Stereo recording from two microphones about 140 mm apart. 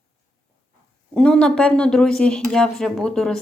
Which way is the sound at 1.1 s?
5° left (ahead or behind).